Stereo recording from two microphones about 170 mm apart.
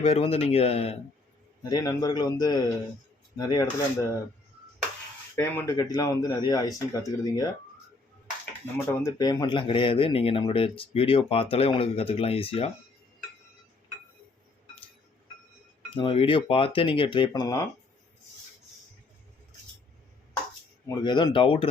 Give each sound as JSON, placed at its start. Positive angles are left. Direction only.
{"t": 0.0, "sound": "speech", "side_deg": 35}
{"t": 1.7, "sound": "speech", "side_deg": 20}
{"t": 5.4, "sound": "speech", "side_deg": 15}
{"t": 8.9, "sound": "speech", "side_deg": 20}
{"t": 16.0, "sound": "speech", "side_deg": 30}
{"t": 20.8, "sound": "speech", "side_deg": 25}